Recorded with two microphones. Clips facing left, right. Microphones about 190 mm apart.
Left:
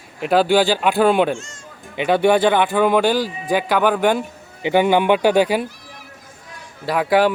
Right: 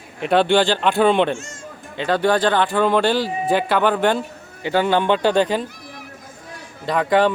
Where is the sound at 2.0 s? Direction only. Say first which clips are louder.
Left 3 dB; 15° left (ahead or behind).